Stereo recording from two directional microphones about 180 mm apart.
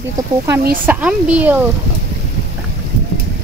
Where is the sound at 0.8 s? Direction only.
5° right (ahead or behind).